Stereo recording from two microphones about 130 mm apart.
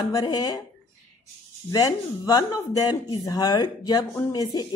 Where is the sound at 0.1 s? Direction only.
25° left (ahead or behind).